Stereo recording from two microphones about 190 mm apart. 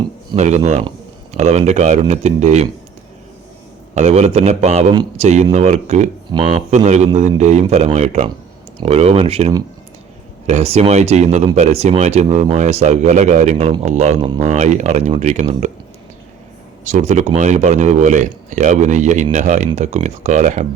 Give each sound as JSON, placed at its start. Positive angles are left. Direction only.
{"t": 0.3, "sound": "speech", "side_deg": -35}
{"t": 3.9, "sound": "speech", "side_deg": -35}
{"t": 6.3, "sound": "speech", "side_deg": -20}
{"t": 6.7, "sound": "speech", "side_deg": -35}
{"t": 16.8, "sound": "speech", "side_deg": -35}